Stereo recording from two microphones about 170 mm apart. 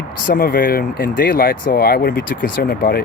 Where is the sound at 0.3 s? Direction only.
60° left (ahead or behind).